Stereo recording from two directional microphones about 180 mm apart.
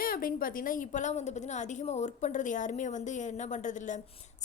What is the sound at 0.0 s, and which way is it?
A woman's voice, 50° left (ahead or behind).